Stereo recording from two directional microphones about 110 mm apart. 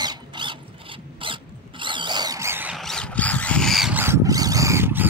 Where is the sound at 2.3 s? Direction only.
25° right (ahead or behind).